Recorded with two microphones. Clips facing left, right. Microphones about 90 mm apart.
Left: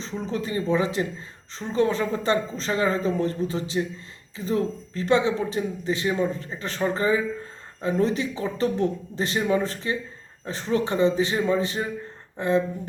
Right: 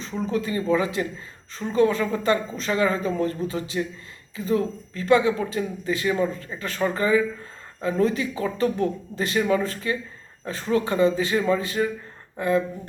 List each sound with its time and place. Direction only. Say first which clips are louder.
0.3 s speech: right 2 dB; 30° left (ahead or behind)